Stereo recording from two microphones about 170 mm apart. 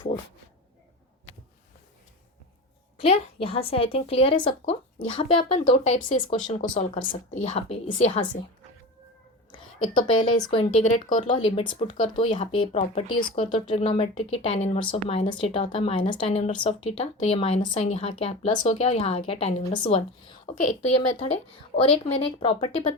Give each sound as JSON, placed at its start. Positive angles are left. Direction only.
{"t": 3.0, "sound": "speech", "side_deg": 35}
{"t": 10.1, "sound": "speech", "side_deg": 30}